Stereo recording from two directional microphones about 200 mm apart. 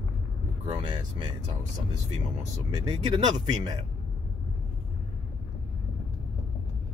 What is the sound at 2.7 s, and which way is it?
Speech, 25° right (ahead or behind).